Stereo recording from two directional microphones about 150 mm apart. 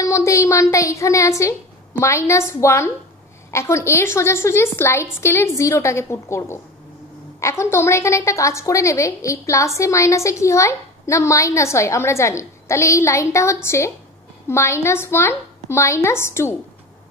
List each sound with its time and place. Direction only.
0.0 s a woman's voice: 20° left (ahead or behind)